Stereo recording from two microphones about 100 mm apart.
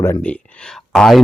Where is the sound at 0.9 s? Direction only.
5° left (ahead or behind).